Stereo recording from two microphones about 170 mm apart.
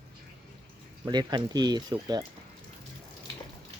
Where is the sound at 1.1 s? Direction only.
25° right (ahead or behind).